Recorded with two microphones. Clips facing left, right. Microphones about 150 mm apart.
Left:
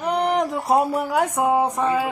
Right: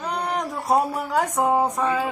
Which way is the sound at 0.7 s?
10° left (ahead or behind).